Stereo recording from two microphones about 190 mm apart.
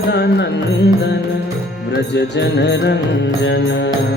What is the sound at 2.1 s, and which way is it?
Music, 65° left (ahead or behind).